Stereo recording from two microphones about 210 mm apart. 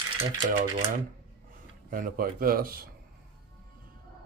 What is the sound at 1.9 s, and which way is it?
Speech, 45° right (ahead or behind).